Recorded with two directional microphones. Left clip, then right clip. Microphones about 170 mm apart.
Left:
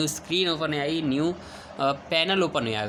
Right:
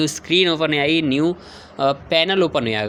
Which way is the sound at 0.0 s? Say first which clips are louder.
Right 8 dB; 30° right (ahead or behind).